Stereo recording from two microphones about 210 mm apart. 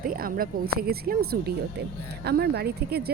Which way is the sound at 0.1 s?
45° right (ahead or behind).